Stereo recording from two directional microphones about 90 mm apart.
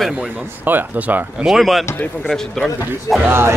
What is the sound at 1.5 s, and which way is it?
Speech, centre (ahead or behind).